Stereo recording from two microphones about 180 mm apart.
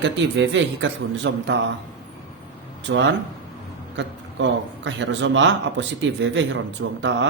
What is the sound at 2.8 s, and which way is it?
A man's voice, 90° right.